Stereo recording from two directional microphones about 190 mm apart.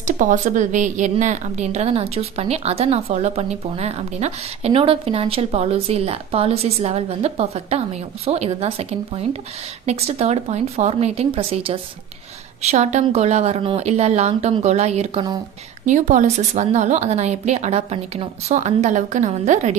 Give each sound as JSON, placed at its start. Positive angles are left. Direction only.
{"t": 0.0, "sound": "a woman's voice", "side_deg": -40}